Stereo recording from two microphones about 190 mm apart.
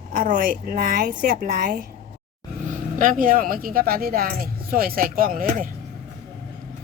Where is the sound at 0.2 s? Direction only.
45° right (ahead or behind).